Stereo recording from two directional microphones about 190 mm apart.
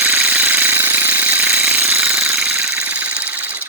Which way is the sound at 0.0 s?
10° right (ahead or behind).